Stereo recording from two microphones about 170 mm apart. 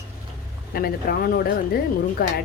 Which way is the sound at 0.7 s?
60° left (ahead or behind).